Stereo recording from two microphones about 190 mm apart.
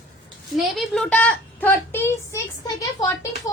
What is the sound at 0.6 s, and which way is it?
A child's voice, centre (ahead or behind).